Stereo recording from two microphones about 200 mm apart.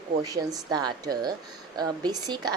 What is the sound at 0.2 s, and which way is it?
Speech, 20° right (ahead or behind).